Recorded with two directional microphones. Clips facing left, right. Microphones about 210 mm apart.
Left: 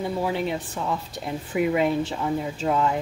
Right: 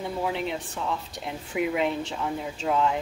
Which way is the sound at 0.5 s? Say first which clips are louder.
Left 3 dB; 5° left (ahead or behind).